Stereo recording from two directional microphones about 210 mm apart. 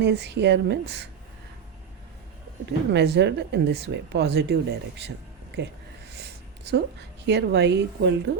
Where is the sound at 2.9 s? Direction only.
55° right (ahead or behind).